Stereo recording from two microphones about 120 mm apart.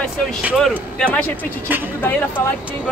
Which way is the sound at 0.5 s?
5° left (ahead or behind).